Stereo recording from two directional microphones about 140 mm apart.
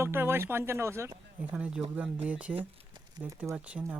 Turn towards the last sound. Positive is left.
turn(degrees=-10)  # may be behind; listen again after turning